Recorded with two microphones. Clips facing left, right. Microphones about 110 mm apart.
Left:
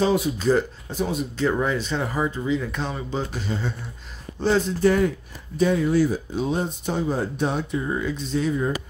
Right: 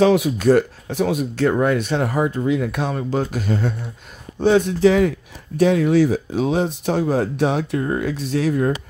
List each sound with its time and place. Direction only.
0.0 s speech: 85° right; by 1.2 s 70° right (ahead or behind)
1.6 s speech: 60° right (ahead or behind)
4.4 s speech: 65° right (ahead or behind)